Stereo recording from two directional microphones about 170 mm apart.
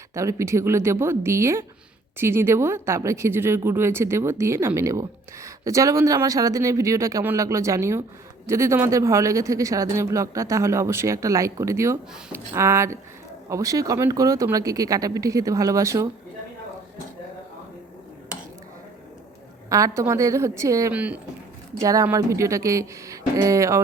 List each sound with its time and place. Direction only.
0.1 s speech: 15° right (ahead or behind)
19.7 s speech: 15° right (ahead or behind)
21.8 s speech: 20° right (ahead or behind)